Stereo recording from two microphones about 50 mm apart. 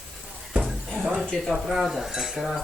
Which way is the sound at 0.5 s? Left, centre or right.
Right.